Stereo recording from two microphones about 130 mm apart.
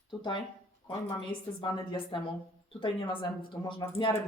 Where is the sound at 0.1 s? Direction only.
35° left (ahead or behind).